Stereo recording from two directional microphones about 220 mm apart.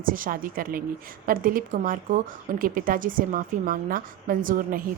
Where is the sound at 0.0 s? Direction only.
40° right (ahead or behind).